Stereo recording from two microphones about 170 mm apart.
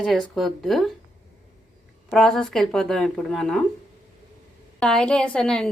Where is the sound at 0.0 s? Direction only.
Centre (ahead or behind).